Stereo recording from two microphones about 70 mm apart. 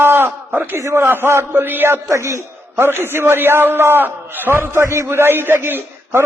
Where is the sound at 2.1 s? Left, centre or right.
Right.